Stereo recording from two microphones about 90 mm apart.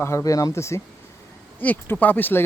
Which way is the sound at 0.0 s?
35° left (ahead or behind).